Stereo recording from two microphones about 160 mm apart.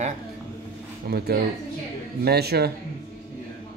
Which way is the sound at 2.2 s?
90° right.